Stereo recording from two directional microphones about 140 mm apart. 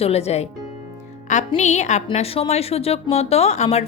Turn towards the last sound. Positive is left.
turn(degrees=50)  # may be behind; listen again after turning